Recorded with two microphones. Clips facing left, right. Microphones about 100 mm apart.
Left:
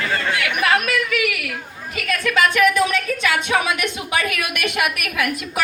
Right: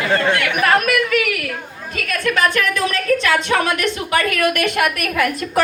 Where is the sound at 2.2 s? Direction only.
10° left (ahead or behind).